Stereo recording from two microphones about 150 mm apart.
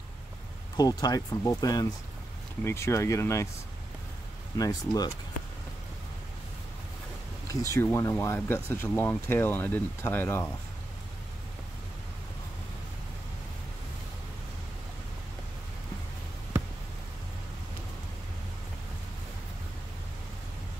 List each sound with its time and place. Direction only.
0.7 s speech: 25° left (ahead or behind)
4.6 s speech: 25° left (ahead or behind)
7.7 s speech: 20° left (ahead or behind)